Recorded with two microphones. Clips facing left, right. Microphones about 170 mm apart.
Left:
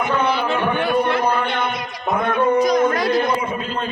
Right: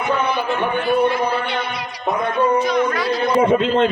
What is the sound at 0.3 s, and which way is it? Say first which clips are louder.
Speech: left 1 dB; 65° left (ahead or behind).